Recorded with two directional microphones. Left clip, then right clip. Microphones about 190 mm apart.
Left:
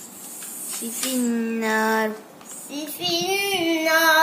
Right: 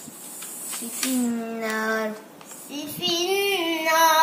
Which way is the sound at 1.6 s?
35° left (ahead or behind).